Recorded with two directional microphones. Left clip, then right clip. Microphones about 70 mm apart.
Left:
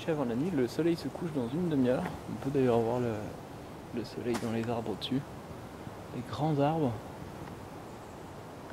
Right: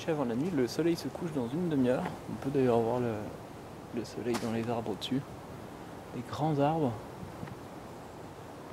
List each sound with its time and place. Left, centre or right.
0.0 s speech: right
4.3 s speech: centre
4.6 s speech: right
6.3 s speech: right